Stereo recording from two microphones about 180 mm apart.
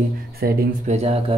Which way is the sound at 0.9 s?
35° right (ahead or behind).